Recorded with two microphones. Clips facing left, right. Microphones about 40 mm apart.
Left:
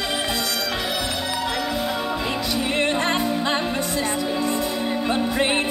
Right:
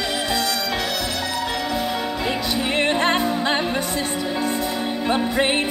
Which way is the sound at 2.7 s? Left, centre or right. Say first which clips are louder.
Right 3 dB; right.